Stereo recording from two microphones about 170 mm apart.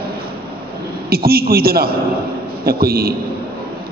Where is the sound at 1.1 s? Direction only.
65° right (ahead or behind).